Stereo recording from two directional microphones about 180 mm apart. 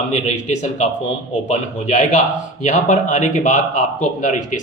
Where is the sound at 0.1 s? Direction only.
40° left (ahead or behind).